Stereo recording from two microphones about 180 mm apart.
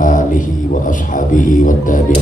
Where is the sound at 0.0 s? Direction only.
50° left (ahead or behind).